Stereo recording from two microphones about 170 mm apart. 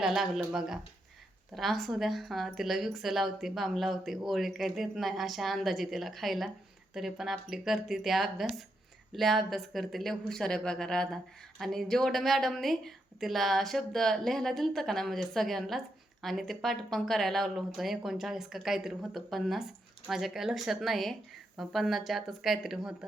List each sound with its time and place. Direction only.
0.0 s a woman's voice: 5° right (ahead or behind)